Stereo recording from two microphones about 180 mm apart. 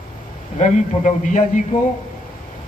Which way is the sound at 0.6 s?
40° left (ahead or behind).